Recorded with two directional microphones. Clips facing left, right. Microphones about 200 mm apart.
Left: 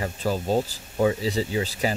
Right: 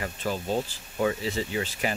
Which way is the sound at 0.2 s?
40° left (ahead or behind).